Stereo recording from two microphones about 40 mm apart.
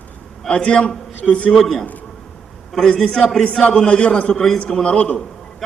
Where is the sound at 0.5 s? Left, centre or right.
Left.